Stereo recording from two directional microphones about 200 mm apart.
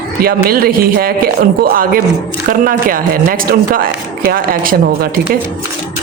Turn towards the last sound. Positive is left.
turn(degrees=-45)  # may be behind; listen again after turning